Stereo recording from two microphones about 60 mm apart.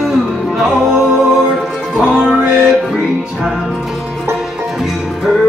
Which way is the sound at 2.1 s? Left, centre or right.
Centre.